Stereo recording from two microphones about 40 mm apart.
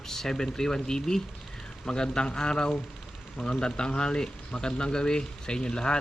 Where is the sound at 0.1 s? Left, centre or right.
Centre.